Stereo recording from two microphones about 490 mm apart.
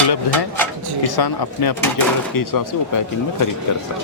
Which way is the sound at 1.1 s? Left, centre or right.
Left.